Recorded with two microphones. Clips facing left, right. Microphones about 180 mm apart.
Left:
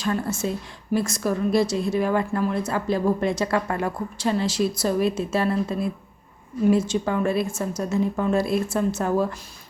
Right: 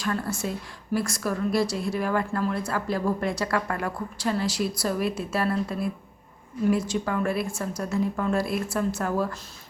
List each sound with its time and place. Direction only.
0.0 s speech: 25° left (ahead or behind)